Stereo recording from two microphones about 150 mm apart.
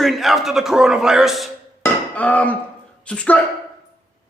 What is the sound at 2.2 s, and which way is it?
Speech, 10° left (ahead or behind).